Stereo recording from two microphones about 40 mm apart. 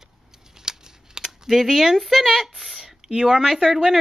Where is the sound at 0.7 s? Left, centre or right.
Centre.